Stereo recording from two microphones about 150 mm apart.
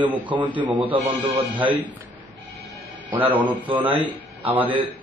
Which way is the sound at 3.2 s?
10° right (ahead or behind).